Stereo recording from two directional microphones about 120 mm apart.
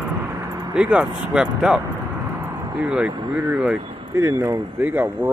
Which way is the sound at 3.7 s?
50° right (ahead or behind).